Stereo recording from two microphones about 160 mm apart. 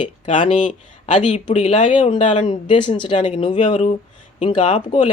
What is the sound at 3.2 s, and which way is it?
Speech, 45° left (ahead or behind).